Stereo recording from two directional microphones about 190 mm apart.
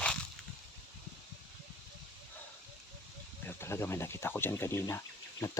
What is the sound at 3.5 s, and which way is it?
Speech, 15° left (ahead or behind).